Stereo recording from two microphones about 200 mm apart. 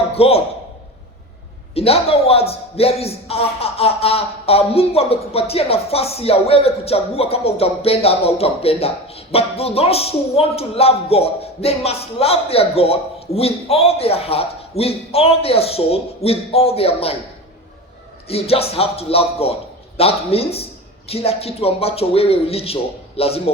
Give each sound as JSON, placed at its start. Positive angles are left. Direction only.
{"t": 0.1, "sound": "a man's voice", "side_deg": 30}
{"t": 1.7, "sound": "a man's voice", "side_deg": 30}
{"t": 18.3, "sound": "a man's voice", "side_deg": 30}